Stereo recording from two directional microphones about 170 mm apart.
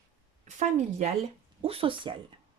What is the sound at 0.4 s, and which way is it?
A woman's voice, 45° right (ahead or behind).